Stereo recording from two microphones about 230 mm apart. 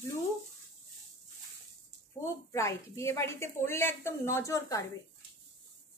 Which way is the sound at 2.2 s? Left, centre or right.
Centre.